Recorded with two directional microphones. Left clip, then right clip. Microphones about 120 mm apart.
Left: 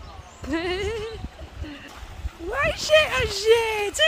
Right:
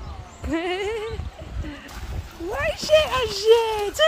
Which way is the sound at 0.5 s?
10° left (ahead or behind).